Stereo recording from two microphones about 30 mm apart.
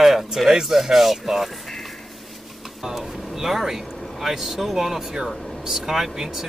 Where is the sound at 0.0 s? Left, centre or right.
Centre.